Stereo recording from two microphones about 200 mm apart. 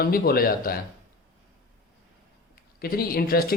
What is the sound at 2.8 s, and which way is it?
Speech, 50° left (ahead or behind).